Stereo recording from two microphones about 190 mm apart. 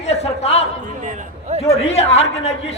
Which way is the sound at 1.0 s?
35° right (ahead or behind).